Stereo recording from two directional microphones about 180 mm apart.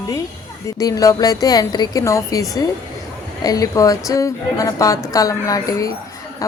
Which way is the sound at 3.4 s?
20° left (ahead or behind).